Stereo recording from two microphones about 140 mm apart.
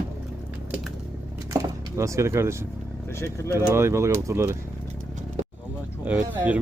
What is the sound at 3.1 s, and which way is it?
Speech, 20° left (ahead or behind).